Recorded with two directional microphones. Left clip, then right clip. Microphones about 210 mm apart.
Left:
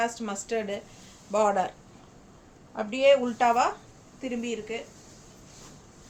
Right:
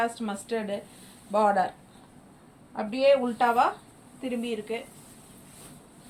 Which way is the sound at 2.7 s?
25° left (ahead or behind).